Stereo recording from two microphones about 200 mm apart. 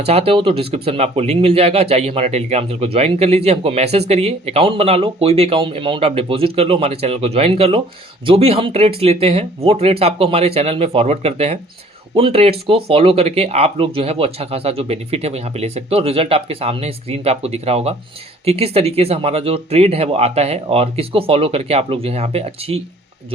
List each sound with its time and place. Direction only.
0.0 s speech: 30° right (ahead or behind)